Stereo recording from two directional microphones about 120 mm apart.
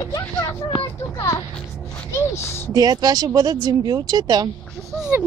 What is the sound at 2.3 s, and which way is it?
Speech, 20° left (ahead or behind).